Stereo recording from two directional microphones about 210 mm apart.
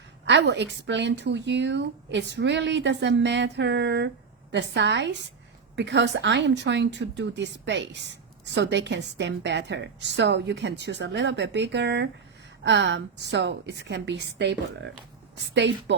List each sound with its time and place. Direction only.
0.3 s speech: 55° right (ahead or behind)